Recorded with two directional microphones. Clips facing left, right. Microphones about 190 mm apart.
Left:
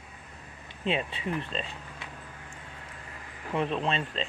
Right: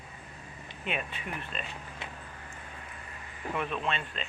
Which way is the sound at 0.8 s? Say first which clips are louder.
Left 6 dB; 30° left (ahead or behind).